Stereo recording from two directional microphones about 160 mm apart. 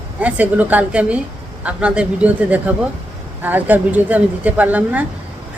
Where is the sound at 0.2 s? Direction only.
10° right (ahead or behind).